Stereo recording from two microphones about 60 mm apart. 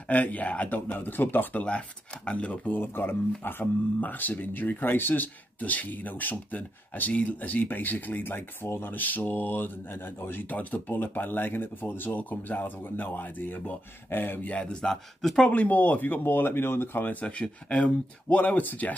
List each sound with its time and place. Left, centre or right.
0.1 s speech: left
1.6 s speech: centre
2.8 s speech: left
14.5 s speech: centre
15.4 s speech: left